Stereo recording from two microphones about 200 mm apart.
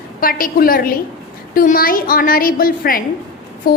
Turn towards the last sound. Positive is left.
turn(degrees=45)  # may be behind; listen again after turning